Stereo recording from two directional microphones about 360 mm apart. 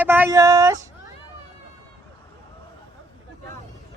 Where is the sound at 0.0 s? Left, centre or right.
Centre.